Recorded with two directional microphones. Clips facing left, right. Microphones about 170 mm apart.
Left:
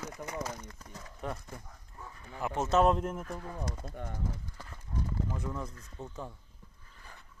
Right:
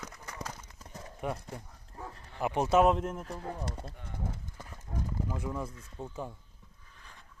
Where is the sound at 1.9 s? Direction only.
35° right (ahead or behind).